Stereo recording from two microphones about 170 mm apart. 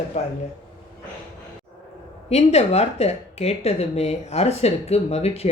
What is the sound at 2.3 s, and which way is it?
Speech, 40° left (ahead or behind).